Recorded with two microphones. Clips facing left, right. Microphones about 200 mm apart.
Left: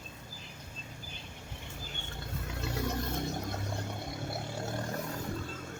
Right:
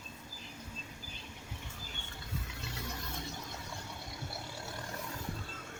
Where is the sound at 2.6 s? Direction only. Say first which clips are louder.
Left 9 dB; 55° left (ahead or behind).